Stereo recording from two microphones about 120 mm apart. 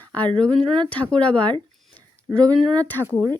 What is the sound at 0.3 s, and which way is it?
Speech, 10° left (ahead or behind).